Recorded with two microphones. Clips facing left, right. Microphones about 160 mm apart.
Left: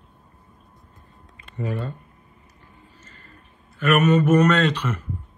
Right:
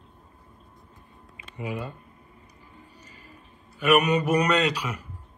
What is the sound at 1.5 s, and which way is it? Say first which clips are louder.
Speech: left 4 dB; 15° right (ahead or behind).